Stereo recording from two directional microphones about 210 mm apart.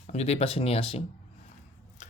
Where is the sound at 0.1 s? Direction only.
30° left (ahead or behind).